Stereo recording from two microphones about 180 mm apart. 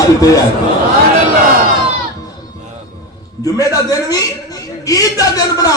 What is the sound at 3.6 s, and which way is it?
Speech, 20° left (ahead or behind).